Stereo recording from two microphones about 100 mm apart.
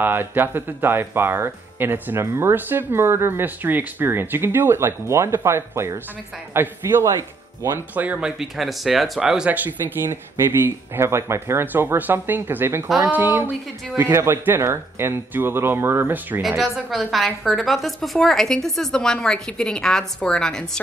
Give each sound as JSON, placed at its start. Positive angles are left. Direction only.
{"t": 0.0, "sound": "speech", "side_deg": -20}
{"t": 16.4, "sound": "a woman's voice", "side_deg": 0}